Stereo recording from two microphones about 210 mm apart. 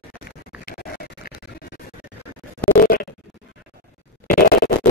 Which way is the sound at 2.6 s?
45° left (ahead or behind).